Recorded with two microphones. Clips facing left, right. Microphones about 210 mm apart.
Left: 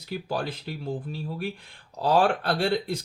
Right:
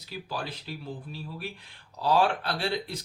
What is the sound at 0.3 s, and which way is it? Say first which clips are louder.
Speech: left 5 dB; 50° left (ahead or behind).